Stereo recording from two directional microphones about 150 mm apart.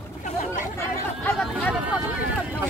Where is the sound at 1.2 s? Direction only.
5° left (ahead or behind).